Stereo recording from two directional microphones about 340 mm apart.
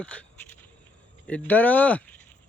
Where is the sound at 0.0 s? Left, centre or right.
Centre.